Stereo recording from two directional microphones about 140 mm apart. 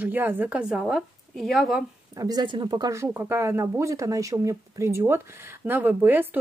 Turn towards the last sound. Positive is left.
turn(degrees=-15)  # may be behind; listen again after turning